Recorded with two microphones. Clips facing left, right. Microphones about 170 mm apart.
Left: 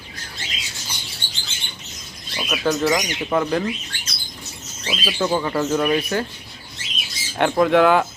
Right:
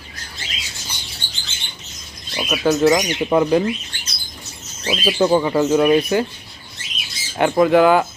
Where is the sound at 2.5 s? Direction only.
5° right (ahead or behind).